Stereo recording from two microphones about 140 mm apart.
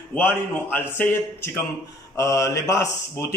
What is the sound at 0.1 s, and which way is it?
A man's voice, 15° left (ahead or behind).